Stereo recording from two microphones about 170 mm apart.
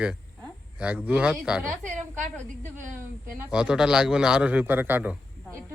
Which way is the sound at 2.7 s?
50° right (ahead or behind).